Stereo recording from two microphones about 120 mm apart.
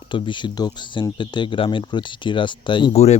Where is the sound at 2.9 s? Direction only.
60° left (ahead or behind).